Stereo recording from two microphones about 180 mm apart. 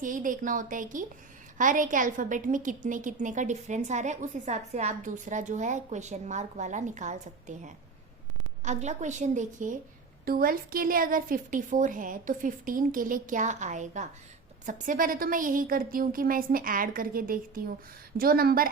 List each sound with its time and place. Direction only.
0.0 s a woman's voice: 45° right (ahead or behind)
10.2 s a woman's voice: 55° right (ahead or behind)